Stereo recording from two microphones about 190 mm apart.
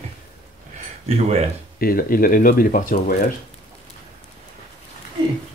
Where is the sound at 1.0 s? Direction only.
35° right (ahead or behind).